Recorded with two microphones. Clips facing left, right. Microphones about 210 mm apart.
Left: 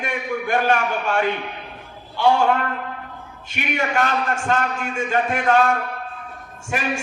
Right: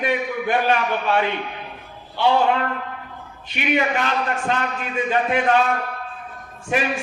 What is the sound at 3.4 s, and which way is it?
A man's voice, 50° left (ahead or behind).